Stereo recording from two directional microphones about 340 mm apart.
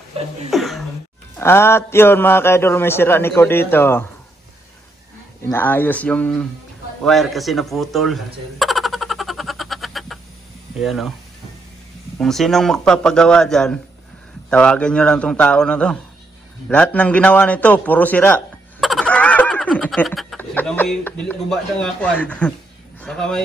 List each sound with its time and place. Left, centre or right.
0.5 s a man's voice: centre
5.5 s a man's voice: centre
7.0 s a sound: centre
10.8 s a man's voice: centre
12.2 s a man's voice: centre